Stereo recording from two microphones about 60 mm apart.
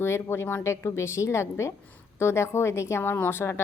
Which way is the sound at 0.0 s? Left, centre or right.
Left.